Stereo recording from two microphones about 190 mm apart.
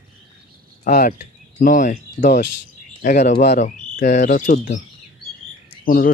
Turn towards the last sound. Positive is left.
turn(degrees=50)  # may be behind; listen again after turning